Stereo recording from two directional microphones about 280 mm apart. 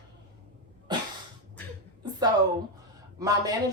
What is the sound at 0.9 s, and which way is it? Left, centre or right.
Sneeze, centre.